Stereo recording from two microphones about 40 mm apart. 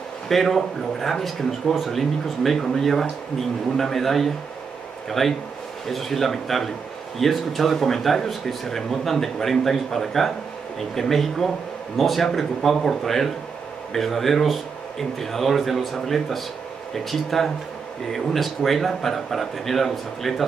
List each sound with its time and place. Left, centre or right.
0.3 s speech: centre